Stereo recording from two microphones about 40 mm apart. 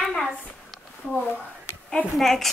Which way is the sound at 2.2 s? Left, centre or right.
Centre.